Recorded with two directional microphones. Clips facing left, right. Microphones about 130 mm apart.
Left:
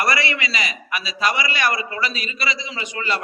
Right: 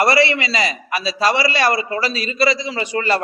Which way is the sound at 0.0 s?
30° right (ahead or behind).